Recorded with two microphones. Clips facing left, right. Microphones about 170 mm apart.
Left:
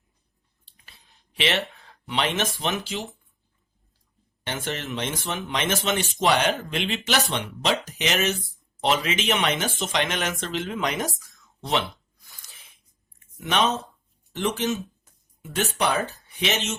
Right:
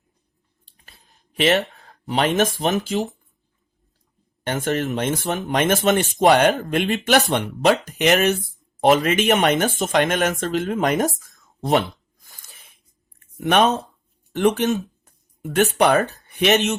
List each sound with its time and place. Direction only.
0.6 s a sound: 45° right (ahead or behind)
1.7 s speech: 40° right (ahead or behind)
4.4 s speech: 45° right (ahead or behind)